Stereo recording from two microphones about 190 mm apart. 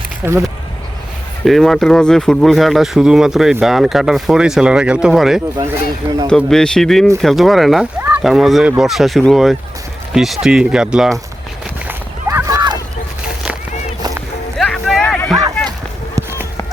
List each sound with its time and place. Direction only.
0.2 s speech: 15° right (ahead or behind)
1.5 s speech: centre (ahead or behind)
5.5 s speech: 20° right (ahead or behind)
6.2 s speech: 5° left (ahead or behind)
11.9 s a sound: 15° right (ahead or behind)
14.6 s a sound: 5° left (ahead or behind)